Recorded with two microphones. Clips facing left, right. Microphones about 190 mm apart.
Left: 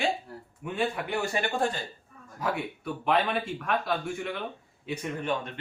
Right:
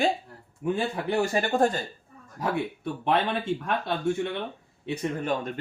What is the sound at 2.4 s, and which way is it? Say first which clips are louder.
Speech: right 3 dB; 30° right (ahead or behind).